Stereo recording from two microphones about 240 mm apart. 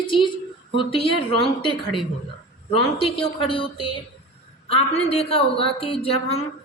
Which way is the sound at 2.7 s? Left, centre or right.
Left.